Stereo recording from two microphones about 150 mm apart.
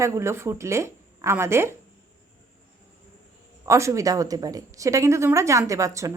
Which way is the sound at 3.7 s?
20° right (ahead or behind).